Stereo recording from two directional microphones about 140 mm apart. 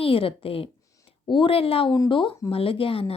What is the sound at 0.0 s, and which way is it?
A woman's voice, 40° left (ahead or behind).